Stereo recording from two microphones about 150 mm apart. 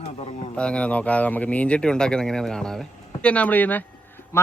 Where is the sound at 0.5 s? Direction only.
5° left (ahead or behind).